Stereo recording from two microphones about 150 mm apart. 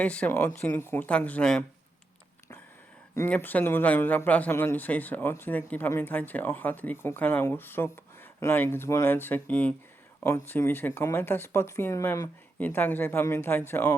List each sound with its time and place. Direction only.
0.0 s speech: 10° left (ahead or behind)
3.2 s speech: 10° left (ahead or behind)